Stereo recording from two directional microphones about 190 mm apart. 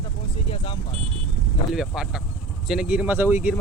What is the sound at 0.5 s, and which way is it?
Vehicle, 25° left (ahead or behind).